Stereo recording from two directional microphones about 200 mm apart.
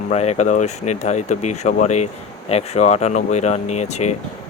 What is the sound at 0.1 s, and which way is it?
Speech, 35° left (ahead or behind).